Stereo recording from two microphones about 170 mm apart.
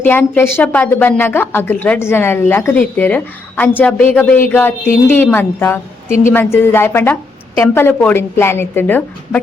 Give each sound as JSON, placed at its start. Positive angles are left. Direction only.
{"t": 0.0, "sound": "a woman's voice", "side_deg": 10}